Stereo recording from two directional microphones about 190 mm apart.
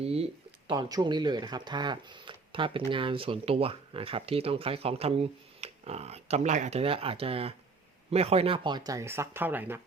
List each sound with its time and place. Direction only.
0.0 s speech: 30° right (ahead or behind)
0.7 s speech: 20° right (ahead or behind)